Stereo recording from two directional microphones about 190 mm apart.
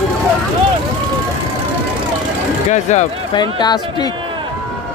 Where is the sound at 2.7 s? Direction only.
40° left (ahead or behind).